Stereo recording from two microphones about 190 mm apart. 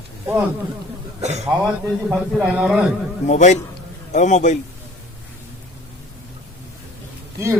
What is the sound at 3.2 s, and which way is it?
A man's voice, 40° left (ahead or behind).